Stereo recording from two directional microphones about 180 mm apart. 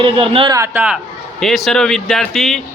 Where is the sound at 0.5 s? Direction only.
15° right (ahead or behind).